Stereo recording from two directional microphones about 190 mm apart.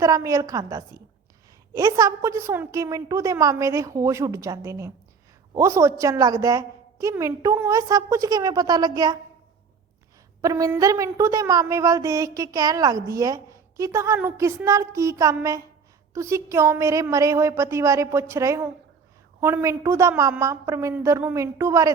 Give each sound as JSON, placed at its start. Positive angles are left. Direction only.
{"t": 0.0, "sound": "a woman's voice", "side_deg": -15}
{"t": 10.4, "sound": "a woman's voice", "side_deg": -15}